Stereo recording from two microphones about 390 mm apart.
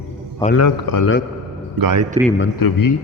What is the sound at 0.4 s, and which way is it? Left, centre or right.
Speech, centre.